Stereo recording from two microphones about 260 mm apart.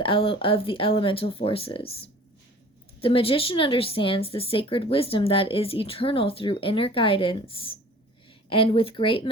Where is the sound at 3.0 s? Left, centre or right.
Left.